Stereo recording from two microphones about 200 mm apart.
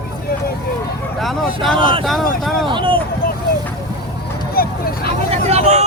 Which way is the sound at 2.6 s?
25° right (ahead or behind).